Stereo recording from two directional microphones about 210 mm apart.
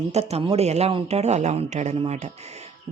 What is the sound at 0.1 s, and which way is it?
Speech, 30° right (ahead or behind).